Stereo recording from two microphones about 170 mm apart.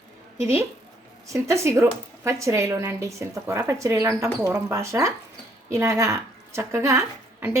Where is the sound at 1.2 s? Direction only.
15° right (ahead or behind).